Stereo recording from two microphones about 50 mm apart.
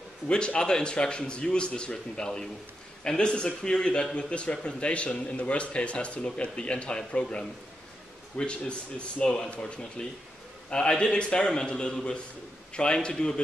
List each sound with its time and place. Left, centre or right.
0.3 s a man's voice: centre